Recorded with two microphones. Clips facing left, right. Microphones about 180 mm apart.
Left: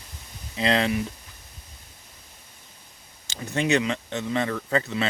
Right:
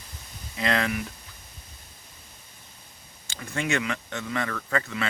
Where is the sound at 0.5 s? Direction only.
25° left (ahead or behind).